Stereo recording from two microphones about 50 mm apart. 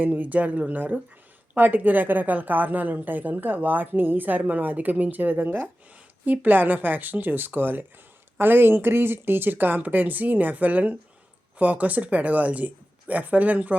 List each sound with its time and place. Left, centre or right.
0.0 s a woman's voice: right